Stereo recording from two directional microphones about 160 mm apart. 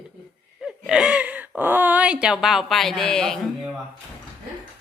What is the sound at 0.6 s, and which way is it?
Speech, 5° right (ahead or behind).